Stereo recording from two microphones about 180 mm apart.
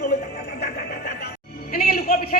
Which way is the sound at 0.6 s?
60° left (ahead or behind).